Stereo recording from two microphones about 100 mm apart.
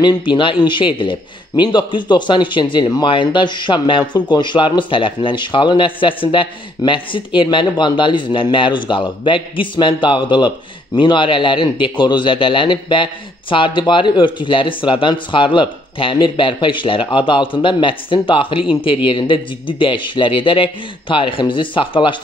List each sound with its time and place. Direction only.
0.0 s a man's voice: 50° left (ahead or behind)